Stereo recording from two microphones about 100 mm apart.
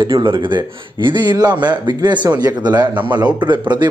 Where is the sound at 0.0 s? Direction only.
50° right (ahead or behind).